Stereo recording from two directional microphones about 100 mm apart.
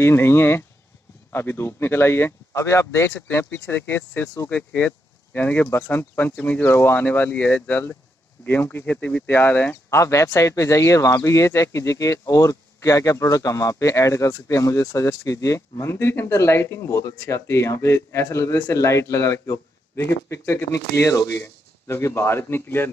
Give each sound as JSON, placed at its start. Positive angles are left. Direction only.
{"t": 0.0, "sound": "speech", "side_deg": 25}
{"t": 9.8, "sound": "speech", "side_deg": 30}